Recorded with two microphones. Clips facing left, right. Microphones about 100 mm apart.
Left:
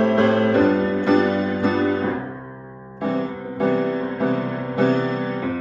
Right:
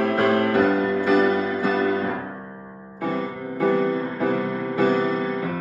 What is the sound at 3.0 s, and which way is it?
Music, 25° left (ahead or behind).